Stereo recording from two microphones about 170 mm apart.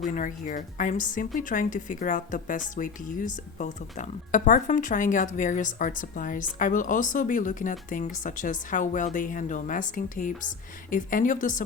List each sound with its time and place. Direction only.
0.1 s speech: 50° left (ahead or behind)